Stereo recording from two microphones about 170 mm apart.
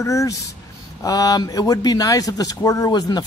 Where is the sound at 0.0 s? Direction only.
20° left (ahead or behind).